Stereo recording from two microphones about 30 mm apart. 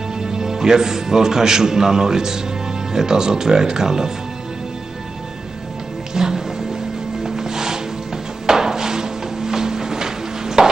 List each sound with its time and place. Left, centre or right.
0.2 s a man's voice: right
6.1 s music: centre
8.5 s a sound: centre